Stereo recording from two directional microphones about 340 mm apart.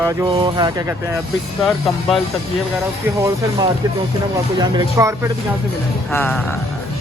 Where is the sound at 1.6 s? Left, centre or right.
Centre.